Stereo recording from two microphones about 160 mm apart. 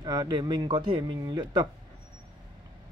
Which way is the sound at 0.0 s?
25° right (ahead or behind).